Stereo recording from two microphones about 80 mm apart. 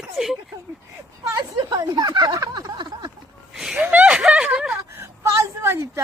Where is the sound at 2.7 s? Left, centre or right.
Right.